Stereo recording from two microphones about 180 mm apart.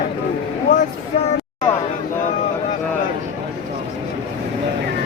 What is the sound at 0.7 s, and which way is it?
Speech, 45° left (ahead or behind).